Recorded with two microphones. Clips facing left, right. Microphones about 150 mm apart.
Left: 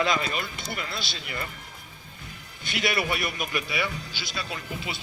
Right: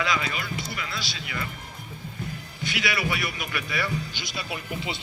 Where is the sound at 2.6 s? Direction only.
50° left (ahead or behind).